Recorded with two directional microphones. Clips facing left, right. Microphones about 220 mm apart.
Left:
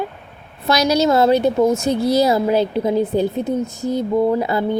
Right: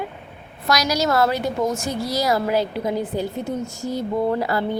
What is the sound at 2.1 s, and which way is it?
A woman's voice, 25° left (ahead or behind).